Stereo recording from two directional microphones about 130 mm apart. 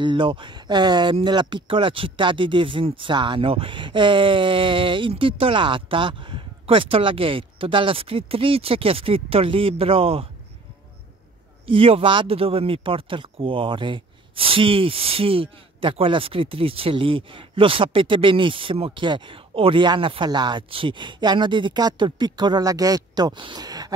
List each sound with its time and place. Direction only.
0.0 s a man's voice: 40° right (ahead or behind)
11.6 s a man's voice: 45° right (ahead or behind); by 23.9 s 30° right (ahead or behind)